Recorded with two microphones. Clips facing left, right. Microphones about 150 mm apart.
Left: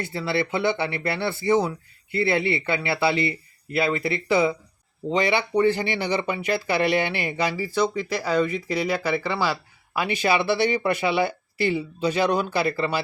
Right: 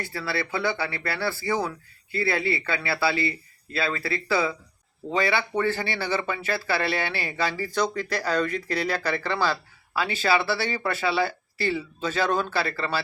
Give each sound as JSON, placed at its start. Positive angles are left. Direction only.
{"t": 0.0, "sound": "speech", "side_deg": 20}